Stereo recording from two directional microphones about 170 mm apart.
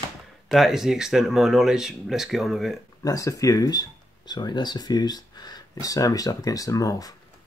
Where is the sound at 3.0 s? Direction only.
20° left (ahead or behind).